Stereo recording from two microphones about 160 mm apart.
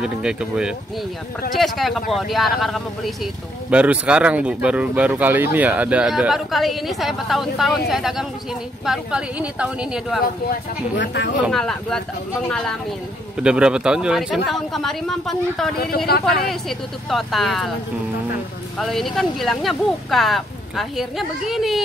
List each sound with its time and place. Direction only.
0.0 s speech: 5° right (ahead or behind)
11.0 s speech: 90° left
11.5 s speech: 5° left (ahead or behind)
18.8 s speech: centre (ahead or behind)